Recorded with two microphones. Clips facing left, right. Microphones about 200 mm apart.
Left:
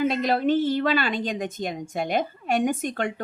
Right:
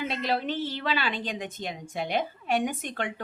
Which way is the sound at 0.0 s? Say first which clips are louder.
Left 7 dB; 45° left (ahead or behind).